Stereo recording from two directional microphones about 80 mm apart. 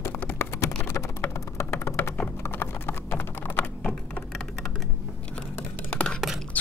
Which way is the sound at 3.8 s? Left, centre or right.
Centre.